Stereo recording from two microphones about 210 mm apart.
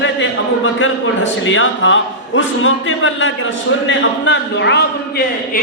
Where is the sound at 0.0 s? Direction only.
65° left (ahead or behind).